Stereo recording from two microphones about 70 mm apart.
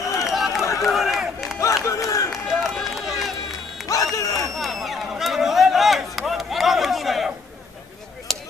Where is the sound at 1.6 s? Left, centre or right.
Left.